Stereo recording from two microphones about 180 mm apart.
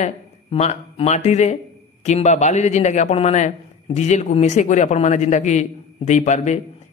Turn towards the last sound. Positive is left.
turn(degrees=40)  # may be behind; listen again after turning